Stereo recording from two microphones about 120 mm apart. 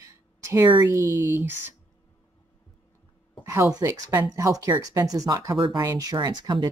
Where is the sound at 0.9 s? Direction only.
20° right (ahead or behind).